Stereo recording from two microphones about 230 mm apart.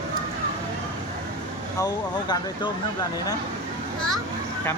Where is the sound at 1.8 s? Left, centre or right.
Centre.